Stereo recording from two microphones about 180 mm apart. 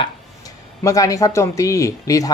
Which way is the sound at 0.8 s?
20° left (ahead or behind).